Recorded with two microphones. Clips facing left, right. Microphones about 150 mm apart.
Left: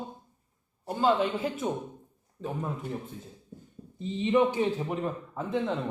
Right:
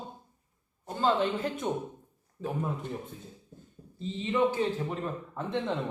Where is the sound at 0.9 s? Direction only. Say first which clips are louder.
Left 2 dB; 10° left (ahead or behind).